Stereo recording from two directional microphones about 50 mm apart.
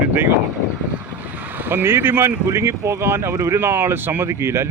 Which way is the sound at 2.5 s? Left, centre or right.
Right.